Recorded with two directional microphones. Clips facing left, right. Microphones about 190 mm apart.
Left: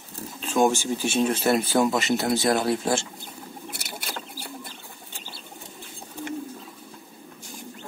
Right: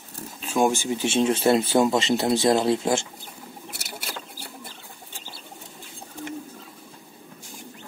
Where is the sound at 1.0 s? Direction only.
25° right (ahead or behind).